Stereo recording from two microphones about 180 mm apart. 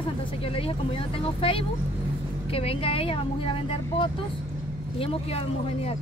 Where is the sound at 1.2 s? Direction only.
30° left (ahead or behind).